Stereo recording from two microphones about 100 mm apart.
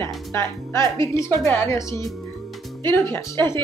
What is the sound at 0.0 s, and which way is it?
Music, 30° left (ahead or behind).